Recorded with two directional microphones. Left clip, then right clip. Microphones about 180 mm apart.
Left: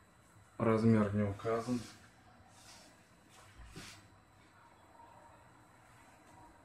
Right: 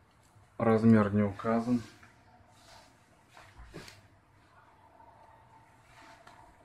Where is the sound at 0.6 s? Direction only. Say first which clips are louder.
Right 5 dB; 5° left (ahead or behind).